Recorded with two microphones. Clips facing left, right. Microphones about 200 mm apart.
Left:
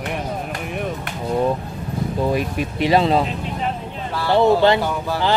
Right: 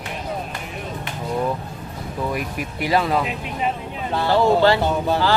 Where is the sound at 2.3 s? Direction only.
25° left (ahead or behind).